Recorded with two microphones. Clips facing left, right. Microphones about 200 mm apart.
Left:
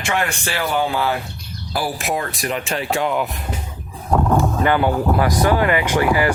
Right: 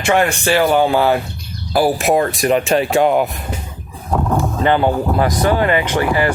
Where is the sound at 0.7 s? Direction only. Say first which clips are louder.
Right 7 dB; 50° right (ahead or behind).